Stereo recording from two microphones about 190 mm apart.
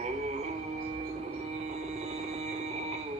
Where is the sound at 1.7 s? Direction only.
35° right (ahead or behind).